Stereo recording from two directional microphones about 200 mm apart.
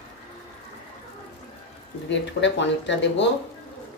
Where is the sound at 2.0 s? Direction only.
65° left (ahead or behind).